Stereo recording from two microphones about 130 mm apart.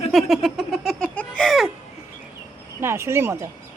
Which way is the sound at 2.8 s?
20° right (ahead or behind).